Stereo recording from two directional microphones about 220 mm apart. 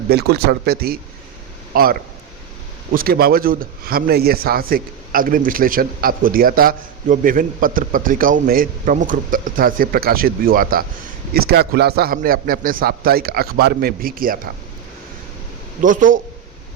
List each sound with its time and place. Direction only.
0.1 s a man's voice: 45° right (ahead or behind)
15.8 s speech: 35° right (ahead or behind)